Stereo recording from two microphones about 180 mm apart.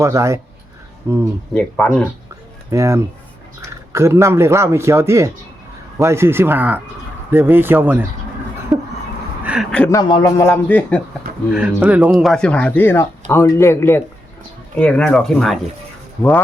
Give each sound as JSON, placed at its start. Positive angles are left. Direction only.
{"t": 0.0, "sound": "speech", "side_deg": -15}
{"t": 1.5, "sound": "speech", "side_deg": 5}
{"t": 2.6, "sound": "speech", "side_deg": -15}
{"t": 8.7, "sound": "a sound", "side_deg": 0}
{"t": 9.9, "sound": "speech", "side_deg": 20}
{"t": 11.5, "sound": "speech", "side_deg": -5}